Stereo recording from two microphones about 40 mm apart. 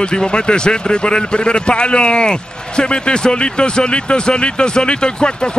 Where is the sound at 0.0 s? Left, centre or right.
Left.